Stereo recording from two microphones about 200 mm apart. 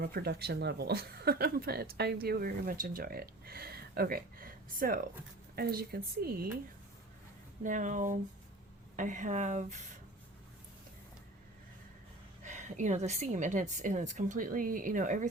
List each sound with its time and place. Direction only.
0.0 s speech: 50° right (ahead or behind)
7.6 s a woman's voice: 40° right (ahead or behind)
12.4 s a woman's voice: 35° right (ahead or behind)